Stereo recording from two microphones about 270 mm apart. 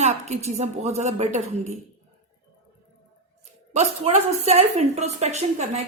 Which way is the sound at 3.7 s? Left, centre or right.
Right.